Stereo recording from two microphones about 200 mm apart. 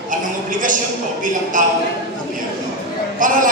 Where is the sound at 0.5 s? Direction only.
40° right (ahead or behind).